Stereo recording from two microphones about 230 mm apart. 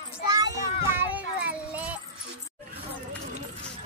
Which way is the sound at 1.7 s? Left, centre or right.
Centre.